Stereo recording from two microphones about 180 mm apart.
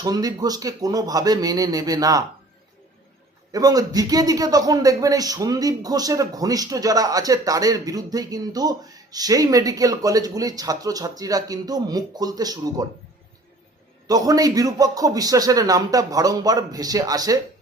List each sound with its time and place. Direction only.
0.0 s speech: 20° right (ahead or behind)
3.5 s speech: 20° right (ahead or behind)
14.1 s speech: 20° right (ahead or behind)